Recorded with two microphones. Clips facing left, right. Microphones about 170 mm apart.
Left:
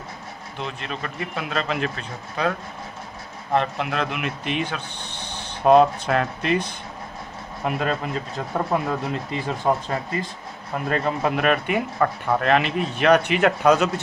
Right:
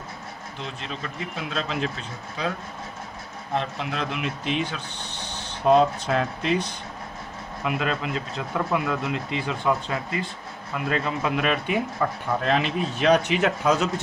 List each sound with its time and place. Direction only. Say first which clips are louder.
0.6 s speech: left 4 dB; 60° left (ahead or behind)
3.5 s speech: left 5 dB; 60° left (ahead or behind)
7.6 s speech: left 2 dB; 40° left (ahead or behind); by 13.9 s 65° left (ahead or behind)